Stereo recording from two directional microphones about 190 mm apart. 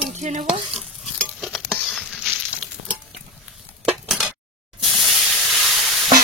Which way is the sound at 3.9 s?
Centre (ahead or behind).